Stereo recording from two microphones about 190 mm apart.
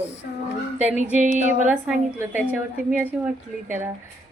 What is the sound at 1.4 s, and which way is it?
Speech, 40° right (ahead or behind).